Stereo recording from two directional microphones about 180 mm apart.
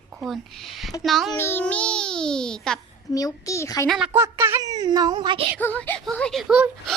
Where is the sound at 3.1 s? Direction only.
20° left (ahead or behind).